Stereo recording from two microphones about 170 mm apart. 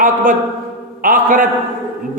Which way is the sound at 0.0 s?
50° right (ahead or behind).